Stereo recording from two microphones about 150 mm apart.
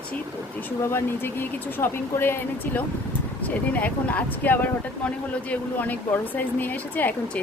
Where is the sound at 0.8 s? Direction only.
15° left (ahead or behind).